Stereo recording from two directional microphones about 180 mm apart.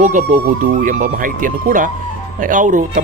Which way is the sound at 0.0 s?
45° right (ahead or behind).